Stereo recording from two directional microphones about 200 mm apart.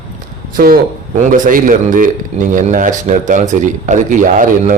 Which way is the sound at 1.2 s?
40° right (ahead or behind).